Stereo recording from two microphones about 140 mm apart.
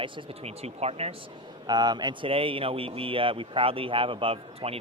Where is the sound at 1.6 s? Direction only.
30° right (ahead or behind).